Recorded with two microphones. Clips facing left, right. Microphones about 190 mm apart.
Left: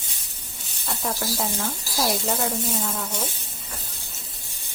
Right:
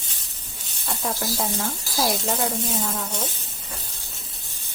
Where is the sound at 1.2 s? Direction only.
Centre (ahead or behind).